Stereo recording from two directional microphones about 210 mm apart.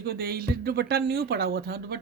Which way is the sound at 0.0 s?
45° right (ahead or behind).